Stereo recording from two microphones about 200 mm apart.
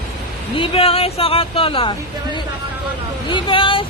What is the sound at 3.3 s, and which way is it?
Speech, 25° left (ahead or behind).